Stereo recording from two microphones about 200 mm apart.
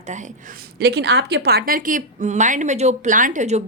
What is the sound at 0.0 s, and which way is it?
A woman's voice, 35° right (ahead or behind).